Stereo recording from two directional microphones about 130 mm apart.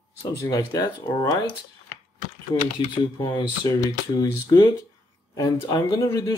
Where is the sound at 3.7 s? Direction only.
25° left (ahead or behind).